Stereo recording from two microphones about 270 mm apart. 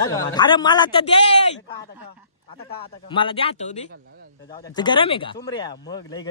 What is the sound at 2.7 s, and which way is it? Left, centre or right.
A man's voice, centre.